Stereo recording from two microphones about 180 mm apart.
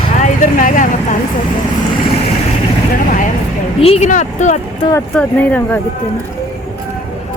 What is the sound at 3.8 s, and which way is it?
Music, 35° left (ahead or behind).